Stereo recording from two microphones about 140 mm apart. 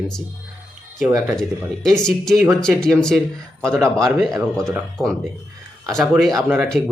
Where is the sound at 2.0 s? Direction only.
5° left (ahead or behind).